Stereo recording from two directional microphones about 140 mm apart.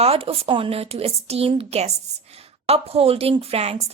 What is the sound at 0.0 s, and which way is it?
A woman's voice, 45° right (ahead or behind).